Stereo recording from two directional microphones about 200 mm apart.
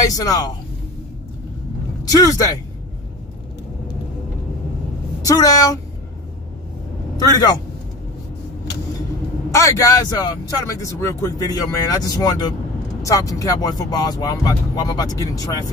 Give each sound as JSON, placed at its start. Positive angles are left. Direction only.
{"t": 0.0, "sound": "speech", "side_deg": 20}
{"t": 2.0, "sound": "speech", "side_deg": 20}
{"t": 5.2, "sound": "speech", "side_deg": 15}
{"t": 7.2, "sound": "speech", "side_deg": 20}
{"t": 9.5, "sound": "speech", "side_deg": 15}